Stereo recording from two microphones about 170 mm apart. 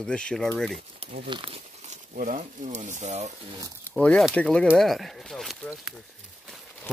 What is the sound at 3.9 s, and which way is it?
Speech, centre (ahead or behind).